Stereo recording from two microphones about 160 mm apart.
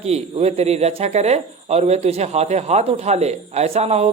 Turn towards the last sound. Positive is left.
turn(degrees=-40)  # may be behind; listen again after turning